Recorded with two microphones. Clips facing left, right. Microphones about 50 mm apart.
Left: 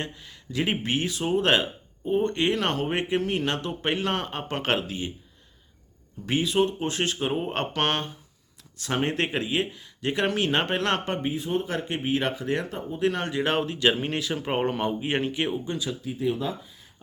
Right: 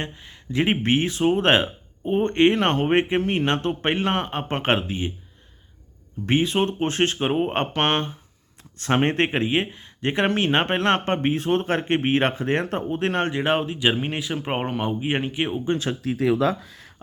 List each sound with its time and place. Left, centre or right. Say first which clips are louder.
0.0 s speech: right 2 dB; right
6.2 s speech: right 2 dB; right
11.0 s speech: right 6 dB; right
13.1 s speech: right 2 dB; right
13.4 s speech: left 1 dB; right
15.6 s speech: right 6 dB; right
16.0 s speech: right 7 dB; right